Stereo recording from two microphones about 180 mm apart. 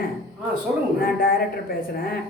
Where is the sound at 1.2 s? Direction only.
55° left (ahead or behind).